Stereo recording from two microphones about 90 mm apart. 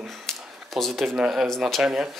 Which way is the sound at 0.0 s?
Centre (ahead or behind).